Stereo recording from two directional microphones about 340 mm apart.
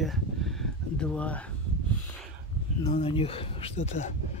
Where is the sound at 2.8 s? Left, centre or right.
Centre.